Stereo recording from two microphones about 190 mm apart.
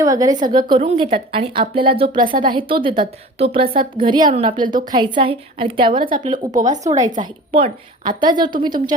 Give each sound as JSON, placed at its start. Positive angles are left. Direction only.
{"t": 0.0, "sound": "a woman's voice", "side_deg": -20}
{"t": 0.5, "sound": "a woman's voice", "side_deg": -30}
{"t": 3.6, "sound": "a woman's voice", "side_deg": -50}
{"t": 3.9, "sound": "a woman's voice", "side_deg": -25}
{"t": 5.9, "sound": "a woman's voice", "side_deg": -45}